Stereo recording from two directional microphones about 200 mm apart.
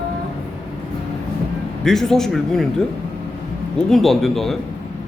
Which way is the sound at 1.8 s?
Centre (ahead or behind).